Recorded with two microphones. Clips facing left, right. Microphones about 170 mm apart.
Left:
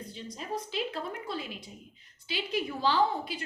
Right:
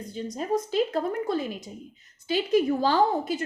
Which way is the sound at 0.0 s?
45° right (ahead or behind).